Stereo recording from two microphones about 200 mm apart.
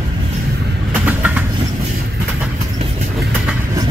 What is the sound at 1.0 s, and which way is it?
Vehicle, 10° right (ahead or behind).